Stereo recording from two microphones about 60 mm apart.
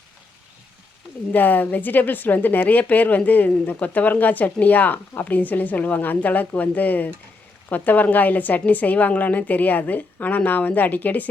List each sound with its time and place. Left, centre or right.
1.3 s a woman's voice: left